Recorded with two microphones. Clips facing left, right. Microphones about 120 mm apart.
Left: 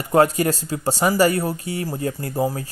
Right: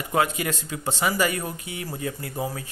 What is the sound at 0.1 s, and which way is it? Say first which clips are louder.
Speech: left 8 dB; 40° left (ahead or behind).